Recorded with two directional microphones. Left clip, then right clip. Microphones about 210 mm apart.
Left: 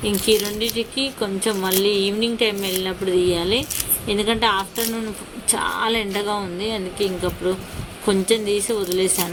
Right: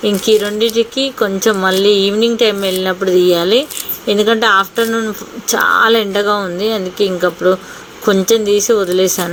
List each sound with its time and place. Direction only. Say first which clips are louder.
0.0 s speech: right 7 dB; 5° right (ahead or behind)